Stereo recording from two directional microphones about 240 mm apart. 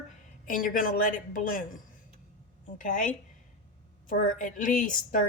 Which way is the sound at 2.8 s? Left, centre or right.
Left.